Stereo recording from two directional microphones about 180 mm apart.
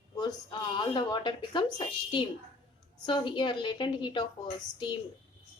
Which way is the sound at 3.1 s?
25° left (ahead or behind).